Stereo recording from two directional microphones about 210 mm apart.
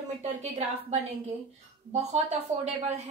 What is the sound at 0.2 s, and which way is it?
A woman's voice, 35° right (ahead or behind).